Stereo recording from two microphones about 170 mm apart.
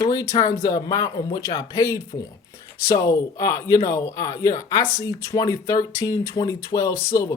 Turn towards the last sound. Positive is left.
turn(degrees=20)  # may be behind; listen again after turning